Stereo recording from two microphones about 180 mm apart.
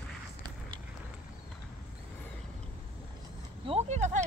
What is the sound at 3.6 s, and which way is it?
Speech, 35° right (ahead or behind).